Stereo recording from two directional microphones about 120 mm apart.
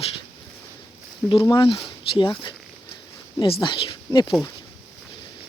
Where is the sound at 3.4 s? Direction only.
45° left (ahead or behind).